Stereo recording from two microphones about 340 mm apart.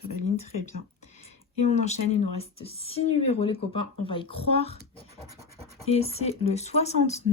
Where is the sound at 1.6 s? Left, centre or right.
Centre.